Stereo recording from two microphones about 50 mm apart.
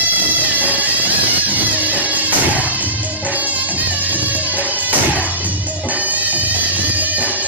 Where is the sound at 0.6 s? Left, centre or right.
Right.